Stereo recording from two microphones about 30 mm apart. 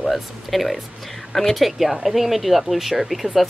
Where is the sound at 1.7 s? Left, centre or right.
Centre.